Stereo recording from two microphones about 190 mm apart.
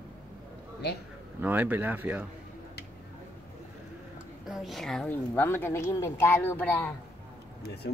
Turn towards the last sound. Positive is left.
turn(degrees=10)  # may be behind; listen again after turning